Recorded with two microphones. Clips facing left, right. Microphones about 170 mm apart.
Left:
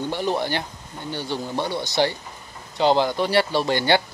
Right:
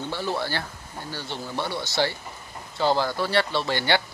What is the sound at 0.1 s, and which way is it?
Speech, 20° left (ahead or behind).